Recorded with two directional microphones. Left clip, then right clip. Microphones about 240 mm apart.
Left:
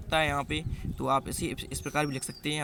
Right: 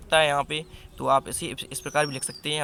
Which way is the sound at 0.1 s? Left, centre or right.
Centre.